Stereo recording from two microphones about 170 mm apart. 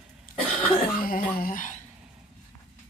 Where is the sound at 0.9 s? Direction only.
60° left (ahead or behind).